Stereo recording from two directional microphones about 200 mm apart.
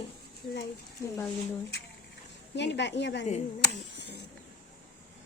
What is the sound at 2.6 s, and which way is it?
A woman's voice, 60° left (ahead or behind).